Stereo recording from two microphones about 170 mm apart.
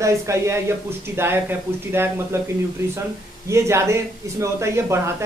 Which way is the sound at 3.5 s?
15° right (ahead or behind).